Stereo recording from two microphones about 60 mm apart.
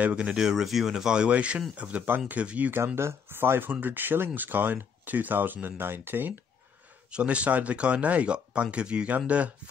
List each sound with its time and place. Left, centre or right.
0.0 s speech: centre
3.0 s speech: right
7.1 s speech: centre